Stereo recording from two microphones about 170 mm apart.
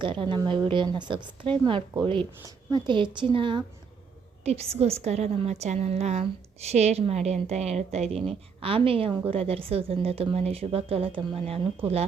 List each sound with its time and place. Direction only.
0.0 s a woman's voice: 30° right (ahead or behind)